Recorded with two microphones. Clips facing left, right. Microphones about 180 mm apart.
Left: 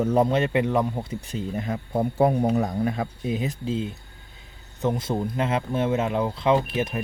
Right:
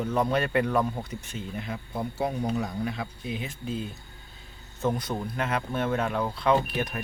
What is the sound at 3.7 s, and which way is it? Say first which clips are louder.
Speech: left 5 dB; 20° left (ahead or behind).